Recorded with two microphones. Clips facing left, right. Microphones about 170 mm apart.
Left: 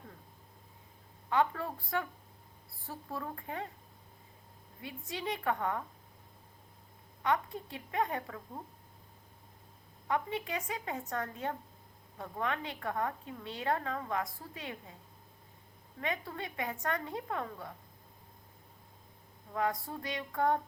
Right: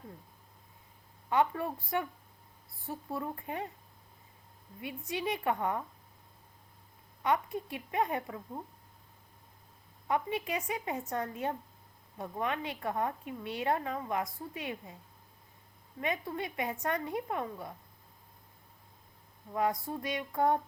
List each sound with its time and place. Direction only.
1.3 s a woman's voice: 20° right (ahead or behind)
4.8 s a woman's voice: 20° right (ahead or behind)
7.2 s a woman's voice: 20° right (ahead or behind)
10.1 s a woman's voice: 20° right (ahead or behind)
16.0 s a woman's voice: 20° right (ahead or behind)
19.5 s a woman's voice: 20° right (ahead or behind)